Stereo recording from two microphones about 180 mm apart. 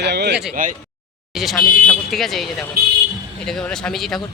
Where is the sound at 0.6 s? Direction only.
50° right (ahead or behind).